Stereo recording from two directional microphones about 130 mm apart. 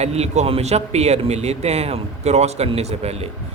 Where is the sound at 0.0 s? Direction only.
55° right (ahead or behind).